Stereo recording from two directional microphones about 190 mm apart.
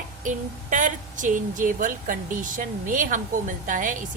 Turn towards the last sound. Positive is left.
turn(degrees=-45)  # may be behind; listen again after turning